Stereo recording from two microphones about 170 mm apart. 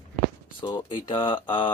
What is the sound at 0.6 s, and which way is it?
Speech, 25° left (ahead or behind).